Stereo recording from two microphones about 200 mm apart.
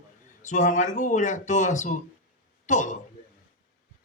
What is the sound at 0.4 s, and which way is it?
Speech, 40° left (ahead or behind).